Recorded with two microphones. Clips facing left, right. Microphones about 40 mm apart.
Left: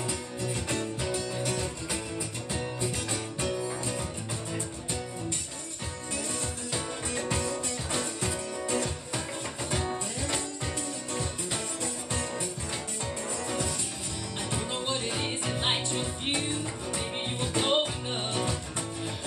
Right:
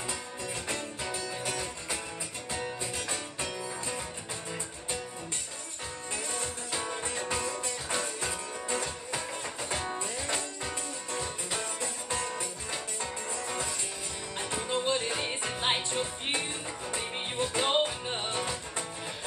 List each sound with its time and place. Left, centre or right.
1.1 s music: right
6.4 s music: centre
7.4 s music: right
12.2 s music: right
13.5 s music: centre
14.9 s music: centre
15.5 s music: centre